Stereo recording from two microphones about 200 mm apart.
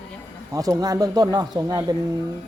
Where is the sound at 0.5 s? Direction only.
15° right (ahead or behind).